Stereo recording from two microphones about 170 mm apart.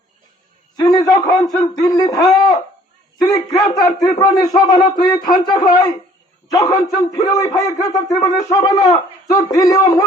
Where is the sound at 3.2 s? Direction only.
20° left (ahead or behind).